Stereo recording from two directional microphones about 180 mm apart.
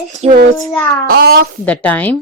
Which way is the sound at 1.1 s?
55° right (ahead or behind).